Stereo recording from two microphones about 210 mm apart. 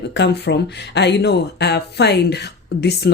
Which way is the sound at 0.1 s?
55° left (ahead or behind).